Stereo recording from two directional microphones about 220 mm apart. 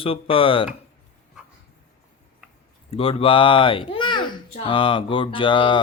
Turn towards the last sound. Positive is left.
turn(degrees=20)  # may be behind; listen again after turning